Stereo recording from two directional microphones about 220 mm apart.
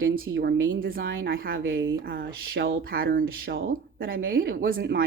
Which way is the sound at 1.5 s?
60° right (ahead or behind).